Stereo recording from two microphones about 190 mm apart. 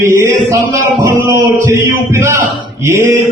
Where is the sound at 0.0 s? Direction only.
15° right (ahead or behind).